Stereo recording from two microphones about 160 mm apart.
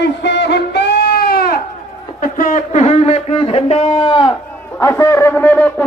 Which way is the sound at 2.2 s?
55° left (ahead or behind).